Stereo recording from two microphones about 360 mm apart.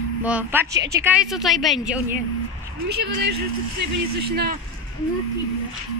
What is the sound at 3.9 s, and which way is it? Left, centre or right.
Speech, right.